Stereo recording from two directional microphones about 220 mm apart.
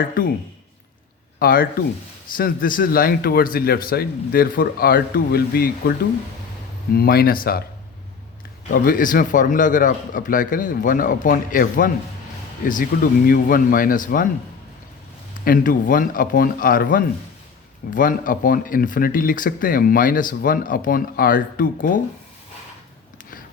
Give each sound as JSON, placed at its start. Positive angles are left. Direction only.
{"t": 1.4, "sound": "speech", "side_deg": 40}
{"t": 8.7, "sound": "speech", "side_deg": 40}
{"t": 15.4, "sound": "speech", "side_deg": 40}